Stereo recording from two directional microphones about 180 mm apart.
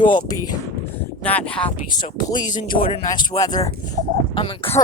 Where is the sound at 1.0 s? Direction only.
10° left (ahead or behind).